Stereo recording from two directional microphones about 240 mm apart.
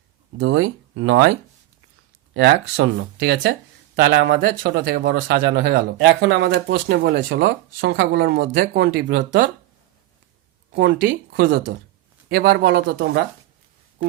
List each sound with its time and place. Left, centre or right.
0.3 s speech: right
10.7 s speech: right